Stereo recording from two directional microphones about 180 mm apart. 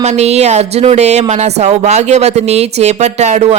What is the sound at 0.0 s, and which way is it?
A woman's voice, 40° right (ahead or behind).